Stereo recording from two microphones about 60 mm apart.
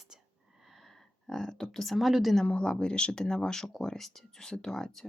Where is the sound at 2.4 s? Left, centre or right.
Centre.